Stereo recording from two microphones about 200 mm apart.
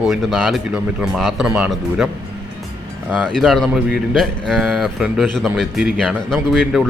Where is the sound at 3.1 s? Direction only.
5° left (ahead or behind).